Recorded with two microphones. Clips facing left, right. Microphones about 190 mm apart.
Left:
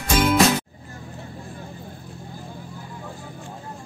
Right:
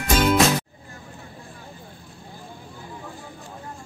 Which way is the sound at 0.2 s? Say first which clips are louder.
Left 1 dB; centre (ahead or behind).